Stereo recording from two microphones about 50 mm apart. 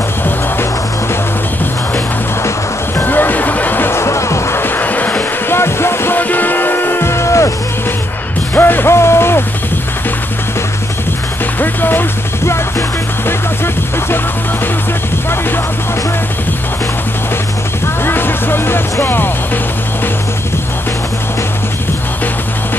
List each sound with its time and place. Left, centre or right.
3.0 s music: left
3.9 s music: left
4.6 s music: left
5.5 s music: left
6.1 s music: left
8.5 s music: left
8.9 s music: left
11.6 s music: left
18.0 s music: left